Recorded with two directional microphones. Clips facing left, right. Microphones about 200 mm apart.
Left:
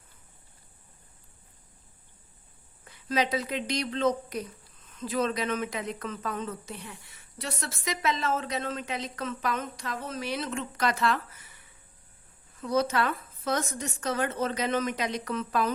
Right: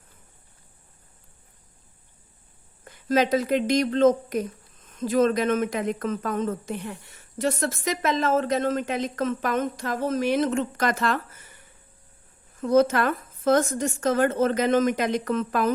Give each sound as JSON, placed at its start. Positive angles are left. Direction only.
{"t": 2.8, "sound": "speech", "side_deg": -45}